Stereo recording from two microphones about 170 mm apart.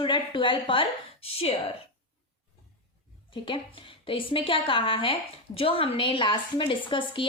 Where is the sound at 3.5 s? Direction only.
30° left (ahead or behind).